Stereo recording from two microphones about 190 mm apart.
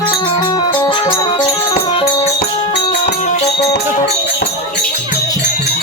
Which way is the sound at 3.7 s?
60° left (ahead or behind).